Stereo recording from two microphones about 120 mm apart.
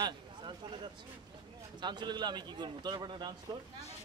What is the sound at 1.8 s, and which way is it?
Speech, 40° right (ahead or behind).